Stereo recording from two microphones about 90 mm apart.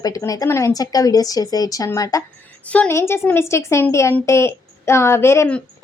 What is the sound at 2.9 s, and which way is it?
A woman's voice, 30° left (ahead or behind).